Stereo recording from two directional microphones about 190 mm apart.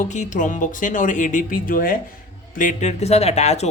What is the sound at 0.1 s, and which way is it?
Speech, 40° left (ahead or behind).